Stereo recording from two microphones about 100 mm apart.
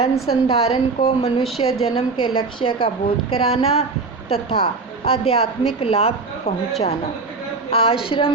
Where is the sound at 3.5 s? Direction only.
90° left.